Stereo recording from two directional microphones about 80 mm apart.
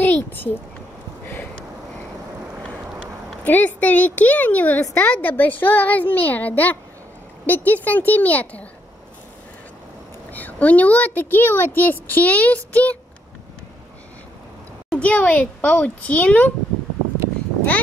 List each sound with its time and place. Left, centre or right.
0.0 s a sound: left
3.4 s a woman's voice: left
10.3 s a woman's voice: centre
14.9 s a child's voice: centre